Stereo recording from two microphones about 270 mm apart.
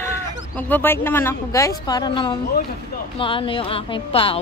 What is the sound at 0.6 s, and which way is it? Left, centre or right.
A woman's voice, centre.